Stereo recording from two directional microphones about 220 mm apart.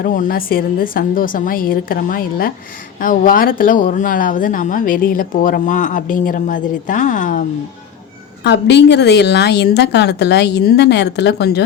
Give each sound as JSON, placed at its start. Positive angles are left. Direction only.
{"t": 0.0, "sound": "a woman's voice", "side_deg": 40}
{"t": 8.4, "sound": "a woman's voice", "side_deg": 50}